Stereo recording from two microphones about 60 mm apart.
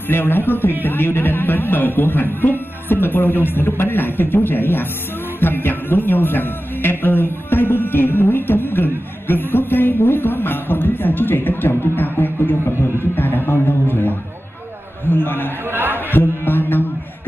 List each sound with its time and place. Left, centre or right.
0.1 s a man's voice: left
15.7 s a man's voice: right
16.1 s music: left